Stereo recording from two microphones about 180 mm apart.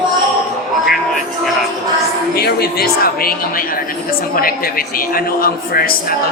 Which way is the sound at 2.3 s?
60° left (ahead or behind).